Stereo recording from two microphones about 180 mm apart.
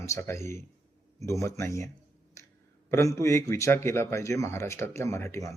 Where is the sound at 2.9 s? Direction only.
15° left (ahead or behind).